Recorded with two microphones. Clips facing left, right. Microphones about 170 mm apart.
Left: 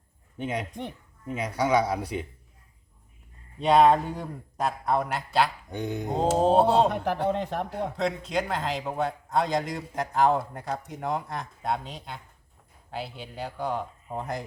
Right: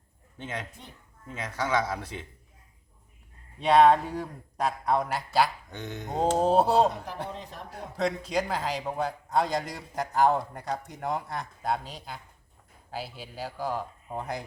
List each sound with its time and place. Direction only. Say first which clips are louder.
0.3 s speech: left 6 dB; 10° left (ahead or behind)
3.6 s a man's voice: even; centre (ahead or behind)
5.7 s speech: left 4 dB; 15° left (ahead or behind)
6.4 s a man's voice: left 2 dB; centre (ahead or behind)
6.9 s speech: left 10 dB; 70° left (ahead or behind)
7.9 s a man's voice: right 2 dB; centre (ahead or behind)